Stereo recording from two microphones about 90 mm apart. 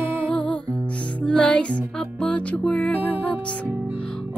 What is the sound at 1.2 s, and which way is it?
Music, 10° left (ahead or behind).